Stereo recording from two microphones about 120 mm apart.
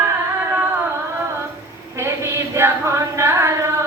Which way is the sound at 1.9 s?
25° right (ahead or behind).